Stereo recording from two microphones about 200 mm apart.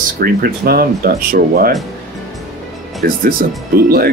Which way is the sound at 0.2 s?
50° right (ahead or behind).